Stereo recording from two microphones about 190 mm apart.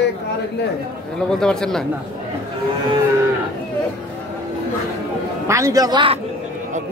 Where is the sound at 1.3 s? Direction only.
5° left (ahead or behind).